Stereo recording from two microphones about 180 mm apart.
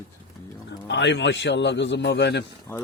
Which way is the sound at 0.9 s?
85° left.